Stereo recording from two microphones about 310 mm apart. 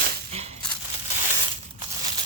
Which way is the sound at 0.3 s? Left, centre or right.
Centre.